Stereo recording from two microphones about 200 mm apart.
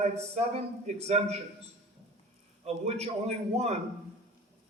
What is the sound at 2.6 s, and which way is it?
A man's voice, 30° right (ahead or behind).